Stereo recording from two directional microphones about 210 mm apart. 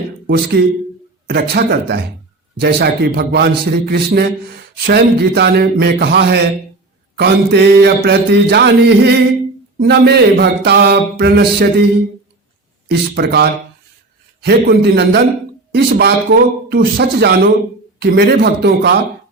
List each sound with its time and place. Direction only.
0.3 s speech: 50° right (ahead or behind)
12.9 s speech: 50° right (ahead or behind)